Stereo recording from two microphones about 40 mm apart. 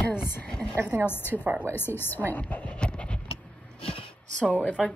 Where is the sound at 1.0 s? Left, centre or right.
Left.